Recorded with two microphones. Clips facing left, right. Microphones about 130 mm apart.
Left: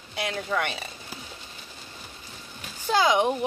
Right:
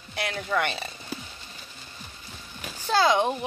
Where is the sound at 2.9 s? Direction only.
15° left (ahead or behind).